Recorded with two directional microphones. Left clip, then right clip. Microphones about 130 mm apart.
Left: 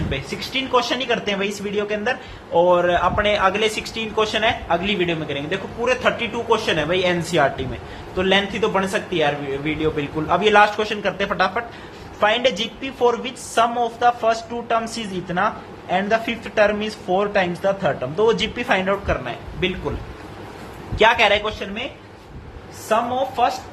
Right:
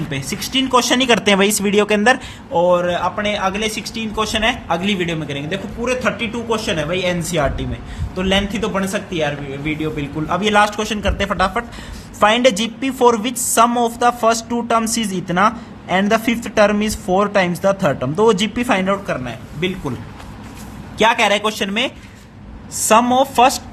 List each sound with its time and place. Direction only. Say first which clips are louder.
0.1 s speech: right 4 dB; 50° right (ahead or behind); by 2.1 s 90° right
2.5 s speech: right 1 dB; 40° right (ahead or behind)
5.5 s a woman's voice: even; 25° right (ahead or behind)
21.0 s a woman's voice: right 1 dB; 40° right (ahead or behind)